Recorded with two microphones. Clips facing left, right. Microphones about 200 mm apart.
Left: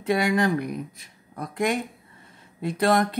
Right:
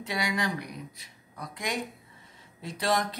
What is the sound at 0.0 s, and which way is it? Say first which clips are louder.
Speech: left 9 dB; 55° left (ahead or behind).